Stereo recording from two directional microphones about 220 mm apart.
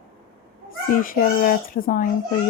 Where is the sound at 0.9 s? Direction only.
40° left (ahead or behind).